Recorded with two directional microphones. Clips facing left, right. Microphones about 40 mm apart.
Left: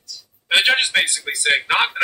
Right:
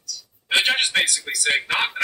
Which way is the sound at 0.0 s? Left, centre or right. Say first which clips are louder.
Right 2 dB; left.